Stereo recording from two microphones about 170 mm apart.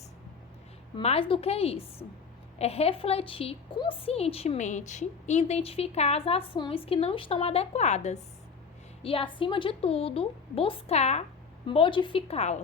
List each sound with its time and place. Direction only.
0.9 s a woman's voice: 35° left (ahead or behind)
9.0 s a woman's voice: 30° left (ahead or behind)